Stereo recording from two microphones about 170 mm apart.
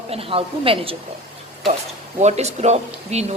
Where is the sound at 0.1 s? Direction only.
35° right (ahead or behind).